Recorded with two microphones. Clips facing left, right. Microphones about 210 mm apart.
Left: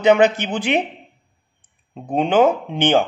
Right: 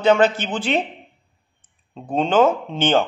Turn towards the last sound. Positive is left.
turn(degrees=15)  # may be behind; listen again after turning